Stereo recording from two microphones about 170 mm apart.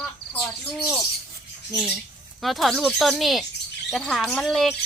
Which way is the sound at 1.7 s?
5° right (ahead or behind).